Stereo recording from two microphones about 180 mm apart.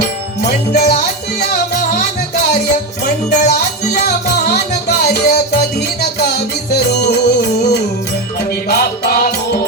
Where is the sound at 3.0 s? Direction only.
60° left (ahead or behind).